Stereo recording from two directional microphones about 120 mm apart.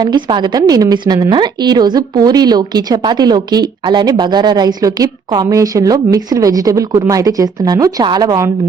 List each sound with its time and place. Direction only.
0.0 s speech: 40° right (ahead or behind)